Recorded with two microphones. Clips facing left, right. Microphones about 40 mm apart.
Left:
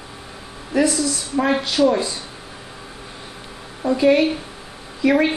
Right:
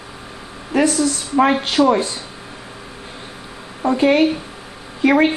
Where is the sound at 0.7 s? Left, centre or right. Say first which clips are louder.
Right 2 dB; right.